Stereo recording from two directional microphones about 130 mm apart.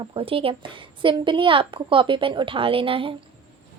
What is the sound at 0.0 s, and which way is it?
A woman's voice, 45° right (ahead or behind).